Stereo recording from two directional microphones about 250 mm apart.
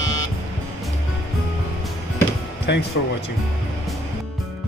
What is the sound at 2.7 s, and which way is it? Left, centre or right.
Speech, left.